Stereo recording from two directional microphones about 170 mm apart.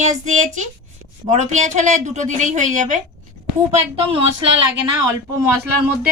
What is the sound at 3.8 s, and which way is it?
Speech, 35° right (ahead or behind).